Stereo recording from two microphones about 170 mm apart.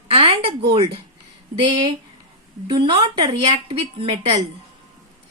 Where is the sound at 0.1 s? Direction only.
35° right (ahead or behind).